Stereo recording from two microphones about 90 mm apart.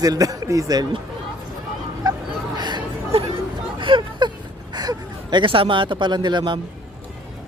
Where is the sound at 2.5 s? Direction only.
55° right (ahead or behind).